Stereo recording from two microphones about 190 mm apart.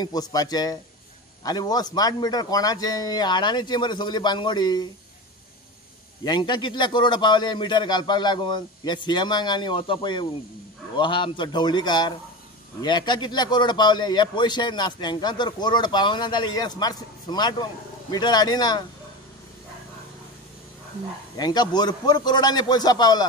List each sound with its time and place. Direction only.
0.0 s a man's voice: 20° left (ahead or behind)
6.2 s a man's voice: 25° left (ahead or behind)
21.4 s a man's voice: 20° left (ahead or behind)